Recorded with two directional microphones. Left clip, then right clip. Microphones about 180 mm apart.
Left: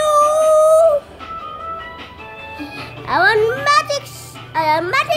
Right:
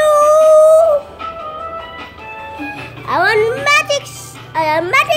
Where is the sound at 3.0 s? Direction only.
10° left (ahead or behind).